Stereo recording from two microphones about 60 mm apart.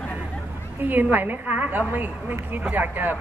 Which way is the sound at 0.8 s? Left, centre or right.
Right.